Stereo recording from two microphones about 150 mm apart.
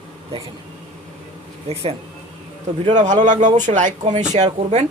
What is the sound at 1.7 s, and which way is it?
Speech, 40° right (ahead or behind).